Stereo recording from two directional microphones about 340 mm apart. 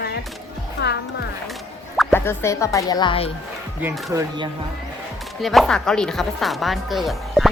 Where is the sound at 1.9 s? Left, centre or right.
Centre.